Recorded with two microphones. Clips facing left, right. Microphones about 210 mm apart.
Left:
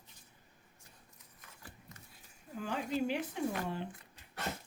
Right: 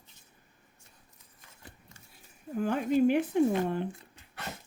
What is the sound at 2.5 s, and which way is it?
Speech, 55° right (ahead or behind).